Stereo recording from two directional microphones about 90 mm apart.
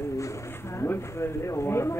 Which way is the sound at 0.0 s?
35° left (ahead or behind).